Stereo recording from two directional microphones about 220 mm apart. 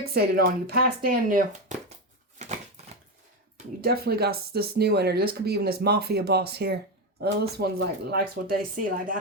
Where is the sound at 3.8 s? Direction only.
45° right (ahead or behind).